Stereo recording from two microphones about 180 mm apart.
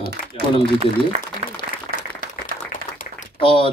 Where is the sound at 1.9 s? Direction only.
50° left (ahead or behind).